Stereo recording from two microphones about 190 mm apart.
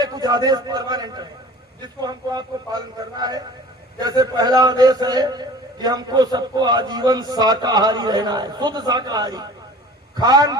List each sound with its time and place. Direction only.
0.0 s a man's voice: 20° right (ahead or behind)